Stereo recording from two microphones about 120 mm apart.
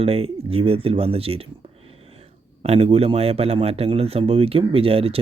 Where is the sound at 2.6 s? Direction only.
55° right (ahead or behind).